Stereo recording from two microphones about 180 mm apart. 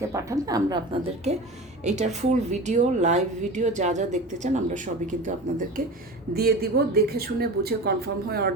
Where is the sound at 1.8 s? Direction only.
40° right (ahead or behind).